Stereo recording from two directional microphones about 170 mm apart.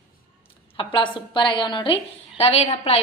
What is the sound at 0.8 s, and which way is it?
A woman's voice, 30° left (ahead or behind).